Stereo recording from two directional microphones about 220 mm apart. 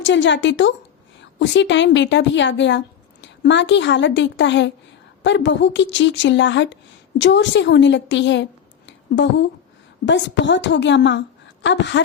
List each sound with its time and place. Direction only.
0.0 s a woman's voice: 55° left (ahead or behind)
8.9 s a sound: 55° left (ahead or behind)
10.1 s a woman's voice: 55° left (ahead or behind)